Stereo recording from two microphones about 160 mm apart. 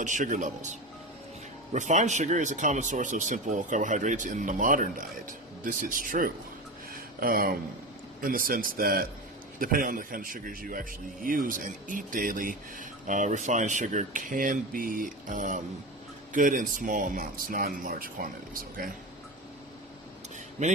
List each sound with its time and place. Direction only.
0.0 s speech: 50° right (ahead or behind)
6.9 s a sound: 65° right (ahead or behind)
8.2 s speech: 60° right (ahead or behind)